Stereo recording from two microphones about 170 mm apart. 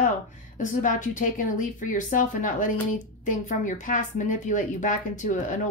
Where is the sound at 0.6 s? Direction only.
50° left (ahead or behind).